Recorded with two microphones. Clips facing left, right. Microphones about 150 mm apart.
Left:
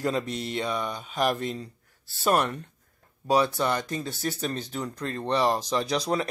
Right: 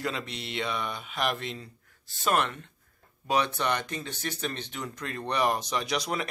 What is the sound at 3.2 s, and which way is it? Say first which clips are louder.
Speech: left 4 dB; 35° left (ahead or behind).